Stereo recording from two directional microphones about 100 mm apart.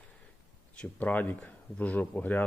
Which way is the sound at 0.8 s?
15° left (ahead or behind).